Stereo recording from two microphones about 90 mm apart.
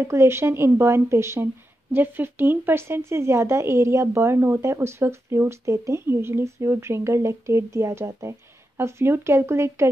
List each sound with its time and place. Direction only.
0.0 s a woman's voice: 30° right (ahead or behind)